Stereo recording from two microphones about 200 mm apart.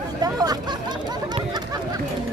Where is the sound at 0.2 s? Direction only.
20° right (ahead or behind).